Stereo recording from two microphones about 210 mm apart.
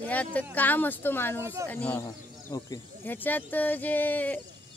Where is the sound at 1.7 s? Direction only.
10° left (ahead or behind).